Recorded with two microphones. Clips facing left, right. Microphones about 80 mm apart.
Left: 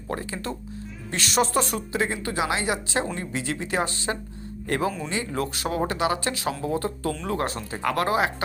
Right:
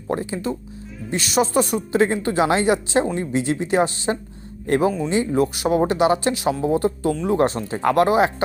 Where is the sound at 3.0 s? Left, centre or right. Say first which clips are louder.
Right 7 dB; right.